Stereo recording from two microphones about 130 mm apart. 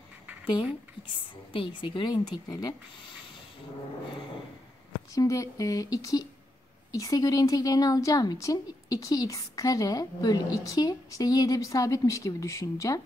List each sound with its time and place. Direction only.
1.5 s speech: 40° left (ahead or behind)
5.1 s a woman's voice: 25° left (ahead or behind)